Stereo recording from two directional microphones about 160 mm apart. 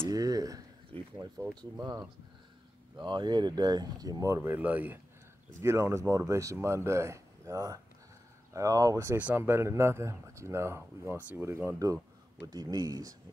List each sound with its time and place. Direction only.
0.0 s a sound: 20° right (ahead or behind)
0.9 s speech: 35° right (ahead or behind)
3.0 s speech: 30° right (ahead or behind)